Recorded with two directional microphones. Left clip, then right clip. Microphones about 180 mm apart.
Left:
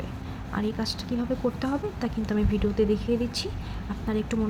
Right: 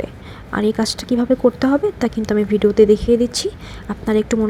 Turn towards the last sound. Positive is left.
turn(degrees=-45)  # may be behind; listen again after turning